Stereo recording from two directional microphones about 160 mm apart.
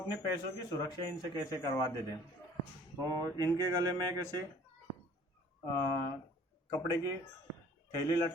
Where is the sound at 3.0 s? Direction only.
25° right (ahead or behind).